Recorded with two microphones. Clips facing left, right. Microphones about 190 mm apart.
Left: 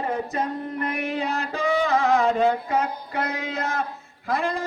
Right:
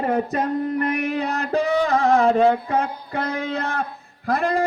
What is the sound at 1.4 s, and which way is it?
Mantra, 35° right (ahead or behind).